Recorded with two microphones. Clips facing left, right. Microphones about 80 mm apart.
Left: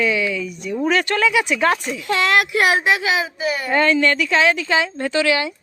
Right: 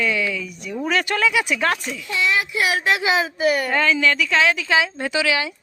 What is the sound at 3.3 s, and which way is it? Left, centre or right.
Speech, right.